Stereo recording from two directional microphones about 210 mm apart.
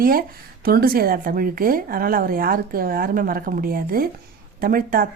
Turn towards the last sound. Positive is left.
turn(degrees=-45)  # may be behind; listen again after turning